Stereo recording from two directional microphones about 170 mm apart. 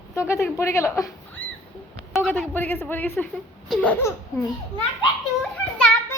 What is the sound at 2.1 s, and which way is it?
Speech, centre (ahead or behind).